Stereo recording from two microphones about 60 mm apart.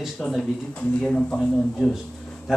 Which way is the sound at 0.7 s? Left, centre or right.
Centre.